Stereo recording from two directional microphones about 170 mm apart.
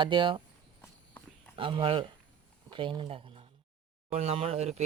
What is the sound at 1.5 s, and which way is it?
Speech, 30° right (ahead or behind).